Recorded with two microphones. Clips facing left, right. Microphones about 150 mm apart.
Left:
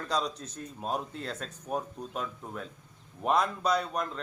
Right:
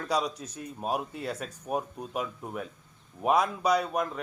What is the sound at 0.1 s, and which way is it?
Speech, 10° right (ahead or behind).